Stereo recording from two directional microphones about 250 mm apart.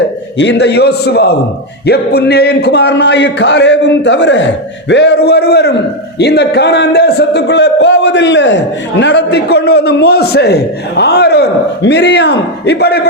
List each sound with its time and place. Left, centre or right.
0.3 s a man's voice: left